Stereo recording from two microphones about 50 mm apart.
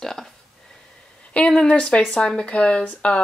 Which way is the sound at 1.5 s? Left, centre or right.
Centre.